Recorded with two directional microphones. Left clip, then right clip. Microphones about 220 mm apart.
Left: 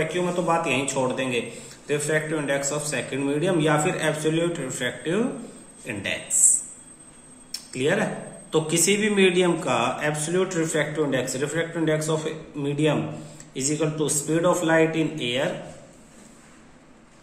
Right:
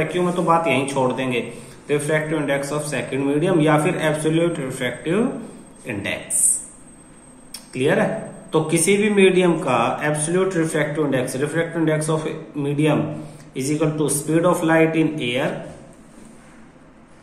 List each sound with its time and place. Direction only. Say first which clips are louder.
0.0 s a man's voice: right 4 dB; 10° left (ahead or behind)
7.5 s a man's voice: right 4 dB; 15° left (ahead or behind)